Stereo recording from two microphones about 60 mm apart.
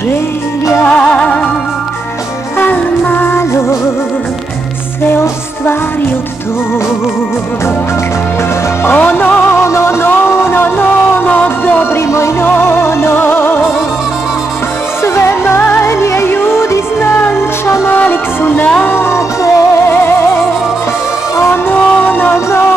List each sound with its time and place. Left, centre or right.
0.8 s music: left
2.6 s music: left
5.1 s music: left
8.8 s music: left
9.6 s music: left
12.1 s music: left
12.4 s music: left
15.1 s music: left
17.9 s music: left
19.9 s music: left
21.4 s music: left